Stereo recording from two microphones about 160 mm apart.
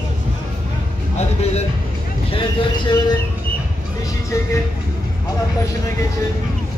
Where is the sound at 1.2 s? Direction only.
40° left (ahead or behind).